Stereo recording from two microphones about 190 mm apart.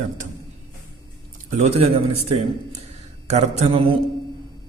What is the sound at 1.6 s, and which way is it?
A man's voice, 35° right (ahead or behind).